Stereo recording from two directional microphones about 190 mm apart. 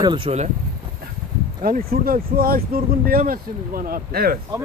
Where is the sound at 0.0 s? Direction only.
30° right (ahead or behind).